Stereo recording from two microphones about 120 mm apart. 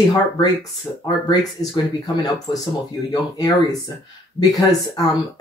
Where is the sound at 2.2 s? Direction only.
30° left (ahead or behind).